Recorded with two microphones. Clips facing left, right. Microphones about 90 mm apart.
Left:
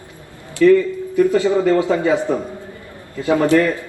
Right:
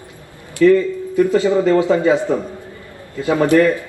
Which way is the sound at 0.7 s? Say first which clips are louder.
Left 1 dB; 20° right (ahead or behind).